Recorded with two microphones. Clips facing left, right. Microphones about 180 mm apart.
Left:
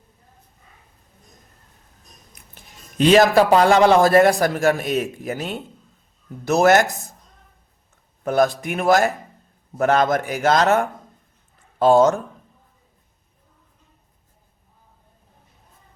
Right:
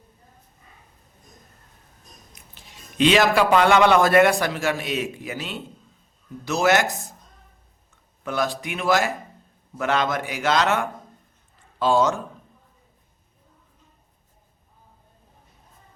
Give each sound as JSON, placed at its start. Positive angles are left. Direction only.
{"t": 2.6, "sound": "a man's voice", "side_deg": 40}
{"t": 8.2, "sound": "a man's voice", "side_deg": 45}